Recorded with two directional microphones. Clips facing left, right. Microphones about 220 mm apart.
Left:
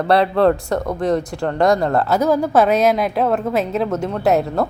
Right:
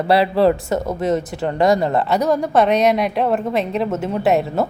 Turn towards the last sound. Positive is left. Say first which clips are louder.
# even
turn(degrees=0)  # may be behind; listen again after turning